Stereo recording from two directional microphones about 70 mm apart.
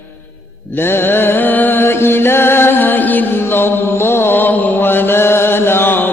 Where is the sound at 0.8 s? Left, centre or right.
Left.